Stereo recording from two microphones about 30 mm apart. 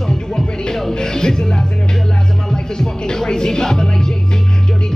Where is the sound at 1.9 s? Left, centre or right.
Left.